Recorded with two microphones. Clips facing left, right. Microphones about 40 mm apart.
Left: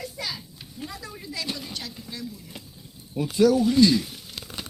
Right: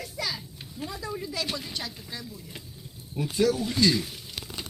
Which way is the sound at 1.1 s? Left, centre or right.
Centre.